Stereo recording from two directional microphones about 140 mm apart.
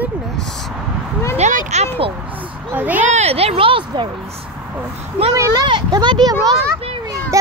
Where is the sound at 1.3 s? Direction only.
55° right (ahead or behind).